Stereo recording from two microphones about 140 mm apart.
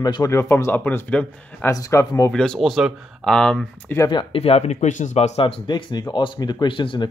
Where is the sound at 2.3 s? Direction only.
5° left (ahead or behind).